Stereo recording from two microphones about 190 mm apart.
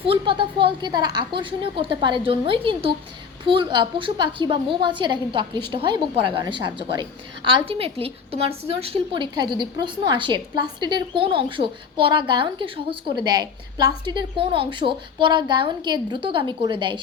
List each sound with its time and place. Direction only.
0.0 s a woman's voice: 25° right (ahead or behind)